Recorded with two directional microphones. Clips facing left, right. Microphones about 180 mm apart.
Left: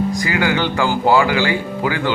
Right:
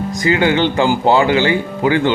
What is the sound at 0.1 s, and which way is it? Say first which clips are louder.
Speech: right 4 dB; 25° right (ahead or behind).